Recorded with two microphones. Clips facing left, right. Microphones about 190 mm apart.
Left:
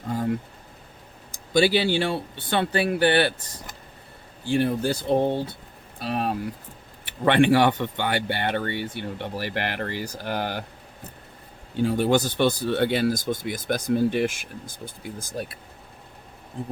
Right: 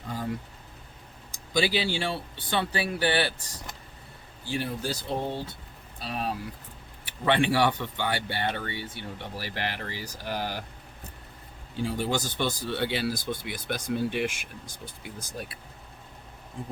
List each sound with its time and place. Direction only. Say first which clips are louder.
1.5 s speech: left 6 dB; 55° left (ahead or behind)
4.4 s speech: left 8 dB; 55° left (ahead or behind)
11.8 s speech: left 8 dB; 60° left (ahead or behind); by 15.5 s 40° left (ahead or behind)